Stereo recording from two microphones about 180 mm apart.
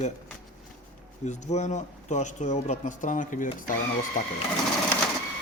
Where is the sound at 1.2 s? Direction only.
40° left (ahead or behind).